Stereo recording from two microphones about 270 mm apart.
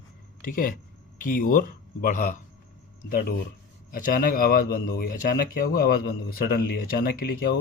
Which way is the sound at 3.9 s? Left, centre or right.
Left.